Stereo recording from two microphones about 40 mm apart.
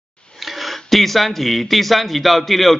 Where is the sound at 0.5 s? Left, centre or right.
Centre.